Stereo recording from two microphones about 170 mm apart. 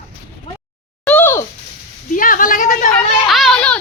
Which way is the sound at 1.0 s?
10° left (ahead or behind).